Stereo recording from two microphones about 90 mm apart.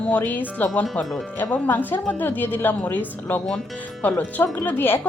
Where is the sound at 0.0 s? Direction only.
15° left (ahead or behind).